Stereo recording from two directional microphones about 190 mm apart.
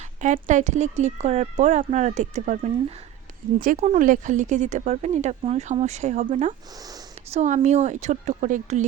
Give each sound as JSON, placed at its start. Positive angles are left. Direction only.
{"t": 0.2, "sound": "speech", "side_deg": -40}
{"t": 3.8, "sound": "speech", "side_deg": -40}